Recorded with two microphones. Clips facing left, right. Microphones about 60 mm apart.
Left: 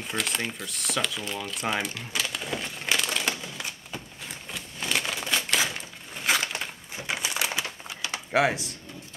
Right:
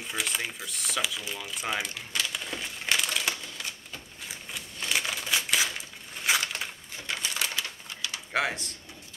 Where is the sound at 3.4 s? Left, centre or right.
Centre.